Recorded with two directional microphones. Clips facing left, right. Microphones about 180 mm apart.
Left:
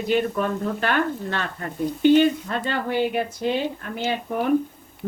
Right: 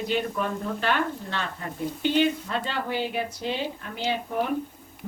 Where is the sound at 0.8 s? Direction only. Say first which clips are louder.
Left 2 dB; 55° left (ahead or behind).